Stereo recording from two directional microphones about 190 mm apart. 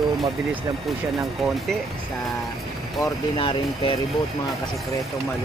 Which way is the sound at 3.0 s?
25° left (ahead or behind).